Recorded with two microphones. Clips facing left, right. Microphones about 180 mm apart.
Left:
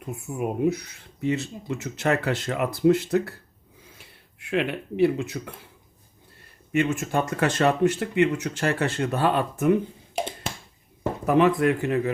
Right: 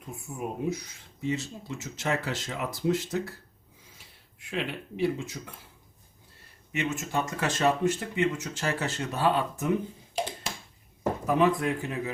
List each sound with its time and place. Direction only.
0.3 s speech: 65° left (ahead or behind)
6.7 s speech: 55° left (ahead or behind)
11.3 s speech: 65° left (ahead or behind)